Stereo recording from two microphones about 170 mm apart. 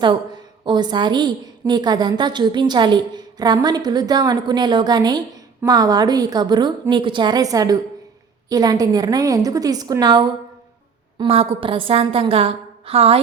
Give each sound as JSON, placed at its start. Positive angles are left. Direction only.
{"t": 0.0, "sound": "a woman's voice", "side_deg": -25}